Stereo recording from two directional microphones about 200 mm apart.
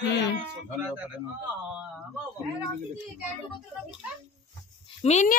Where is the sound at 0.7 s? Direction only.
5° right (ahead or behind).